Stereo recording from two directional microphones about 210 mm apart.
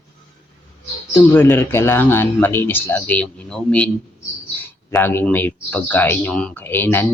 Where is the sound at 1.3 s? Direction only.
10° left (ahead or behind).